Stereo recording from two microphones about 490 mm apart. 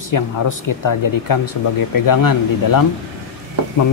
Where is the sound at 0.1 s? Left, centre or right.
Left.